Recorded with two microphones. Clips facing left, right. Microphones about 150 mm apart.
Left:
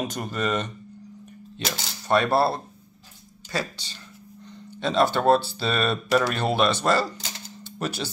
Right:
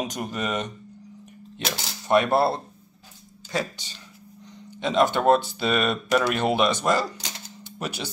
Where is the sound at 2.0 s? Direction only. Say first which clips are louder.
Right 1 dB; 15° right (ahead or behind).